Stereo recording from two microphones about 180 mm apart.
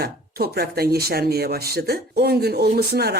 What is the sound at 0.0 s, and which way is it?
Speech, 60° right (ahead or behind).